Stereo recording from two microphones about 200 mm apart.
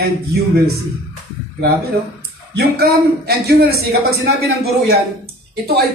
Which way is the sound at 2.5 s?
55° right (ahead or behind).